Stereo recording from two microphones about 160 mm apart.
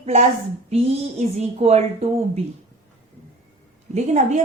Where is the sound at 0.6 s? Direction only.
45° right (ahead or behind).